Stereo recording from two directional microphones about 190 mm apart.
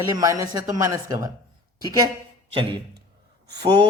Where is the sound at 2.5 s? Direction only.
25° right (ahead or behind).